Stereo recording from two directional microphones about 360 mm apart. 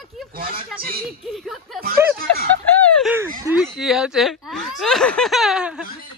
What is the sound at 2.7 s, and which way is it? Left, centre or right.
Speech, centre.